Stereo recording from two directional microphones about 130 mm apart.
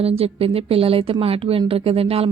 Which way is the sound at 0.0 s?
50° right (ahead or behind).